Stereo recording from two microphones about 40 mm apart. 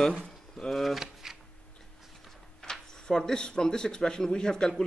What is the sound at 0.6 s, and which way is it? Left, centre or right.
Speech, centre.